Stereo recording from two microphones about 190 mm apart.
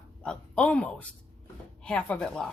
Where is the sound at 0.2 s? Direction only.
5° left (ahead or behind).